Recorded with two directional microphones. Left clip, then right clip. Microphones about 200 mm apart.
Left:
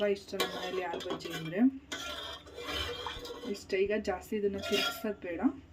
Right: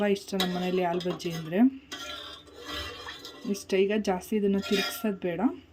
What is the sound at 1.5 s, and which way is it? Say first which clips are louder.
Speech: right 5 dB; 45° right (ahead or behind).